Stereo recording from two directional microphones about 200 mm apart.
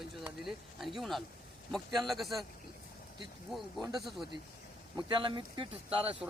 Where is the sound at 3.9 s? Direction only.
Centre (ahead or behind).